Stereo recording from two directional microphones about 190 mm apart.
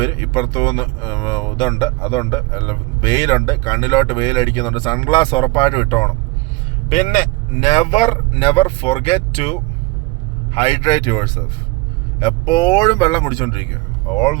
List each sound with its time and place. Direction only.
0.0 s speech: 25° left (ahead or behind)
6.9 s speech: 40° left (ahead or behind)